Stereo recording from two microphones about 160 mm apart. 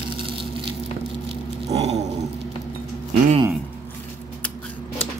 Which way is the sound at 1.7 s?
40° right (ahead or behind).